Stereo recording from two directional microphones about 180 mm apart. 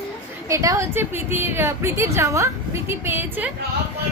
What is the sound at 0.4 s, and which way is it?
A woman's voice, 20° right (ahead or behind).